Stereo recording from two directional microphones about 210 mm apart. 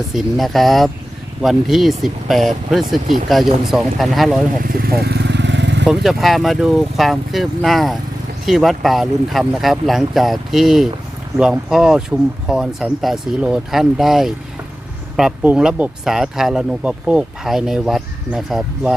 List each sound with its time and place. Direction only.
0.1 s speech: centre (ahead or behind)
4.8 s vehicle: 45° right (ahead or behind)
5.9 s speech: centre (ahead or behind)